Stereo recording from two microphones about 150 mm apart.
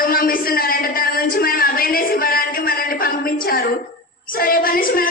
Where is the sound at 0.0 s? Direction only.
75° left (ahead or behind).